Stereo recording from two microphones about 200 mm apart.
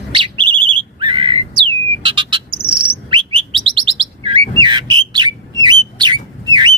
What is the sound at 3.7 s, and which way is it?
Bird, 25° right (ahead or behind).